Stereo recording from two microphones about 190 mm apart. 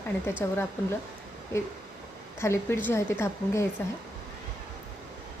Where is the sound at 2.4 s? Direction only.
15° left (ahead or behind).